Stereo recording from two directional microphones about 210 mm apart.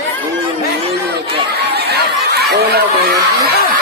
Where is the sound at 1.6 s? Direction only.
50° right (ahead or behind).